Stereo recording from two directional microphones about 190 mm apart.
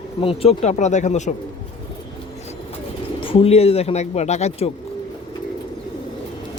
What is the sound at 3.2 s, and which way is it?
Speech, 30° left (ahead or behind).